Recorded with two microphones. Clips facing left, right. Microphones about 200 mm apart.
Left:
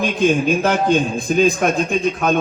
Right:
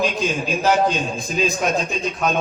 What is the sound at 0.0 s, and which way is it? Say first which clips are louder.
A man's voice: left 6 dB; 55° left (ahead or behind).